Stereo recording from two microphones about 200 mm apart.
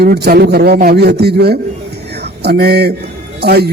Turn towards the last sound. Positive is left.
turn(degrees=-55)  # may be behind; listen again after turning